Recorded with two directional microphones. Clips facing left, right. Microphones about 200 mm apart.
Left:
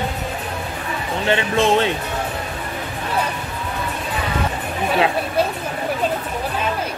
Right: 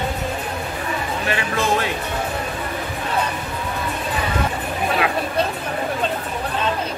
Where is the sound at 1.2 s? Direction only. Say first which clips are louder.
Left 7 dB; 25° left (ahead or behind).